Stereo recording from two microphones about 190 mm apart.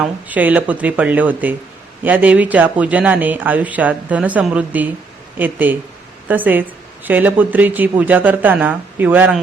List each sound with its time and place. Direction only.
0.0 s a woman's voice: 10° right (ahead or behind)